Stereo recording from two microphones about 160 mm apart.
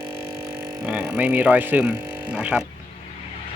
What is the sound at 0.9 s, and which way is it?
Speech, 10° right (ahead or behind).